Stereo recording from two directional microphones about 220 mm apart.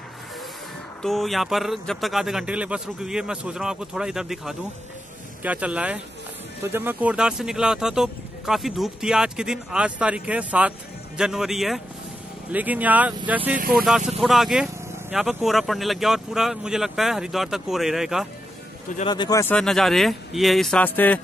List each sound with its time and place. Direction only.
1.0 s speech: centre (ahead or behind)
19.0 s speech: 20° left (ahead or behind)
19.5 s speech: centre (ahead or behind)